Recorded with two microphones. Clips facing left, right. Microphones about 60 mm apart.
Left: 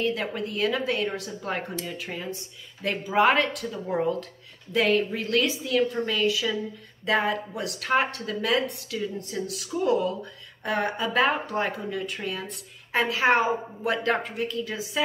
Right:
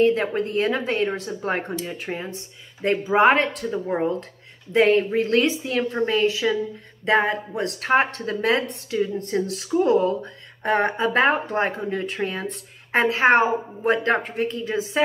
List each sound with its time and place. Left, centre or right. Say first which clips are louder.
0.0 s speech: right 8 dB; right